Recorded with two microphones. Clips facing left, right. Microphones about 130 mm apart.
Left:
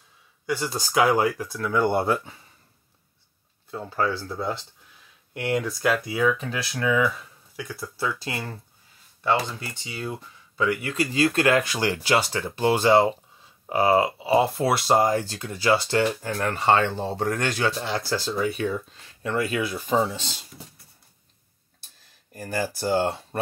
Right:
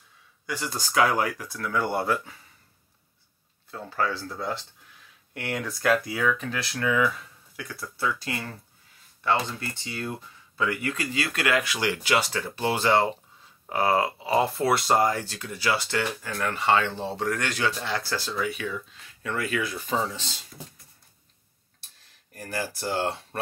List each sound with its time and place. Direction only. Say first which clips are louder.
0.5 s speech: left 5 dB; 25° left (ahead or behind)
3.7 s speech: left 3 dB; 25° left (ahead or behind)
9.2 s speech: left 2 dB; 15° left (ahead or behind)
22.3 s speech: left 4 dB; 15° left (ahead or behind)